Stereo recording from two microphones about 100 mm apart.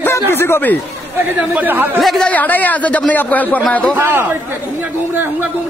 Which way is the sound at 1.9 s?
Centre (ahead or behind).